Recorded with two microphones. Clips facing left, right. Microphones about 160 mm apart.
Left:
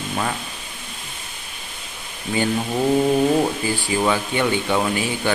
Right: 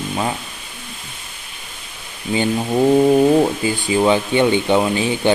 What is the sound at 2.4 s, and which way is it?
Speech, 20° right (ahead or behind).